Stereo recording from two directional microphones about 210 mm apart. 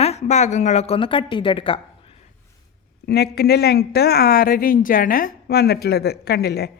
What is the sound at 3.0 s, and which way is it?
Speech, 50° left (ahead or behind).